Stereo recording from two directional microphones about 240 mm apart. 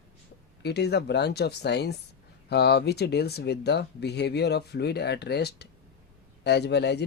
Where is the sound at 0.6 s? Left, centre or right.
Left.